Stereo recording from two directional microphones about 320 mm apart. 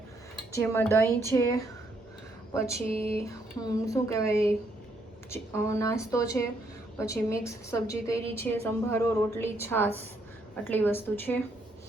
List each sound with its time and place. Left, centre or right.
0.5 s a woman's voice: centre
2.8 s a sound: centre
3.2 s a woman's voice: centre